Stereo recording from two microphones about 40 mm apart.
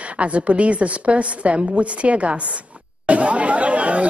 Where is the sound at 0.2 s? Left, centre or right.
Right.